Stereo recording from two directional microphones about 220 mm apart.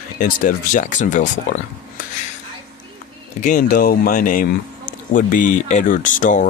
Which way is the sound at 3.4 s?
40° left (ahead or behind).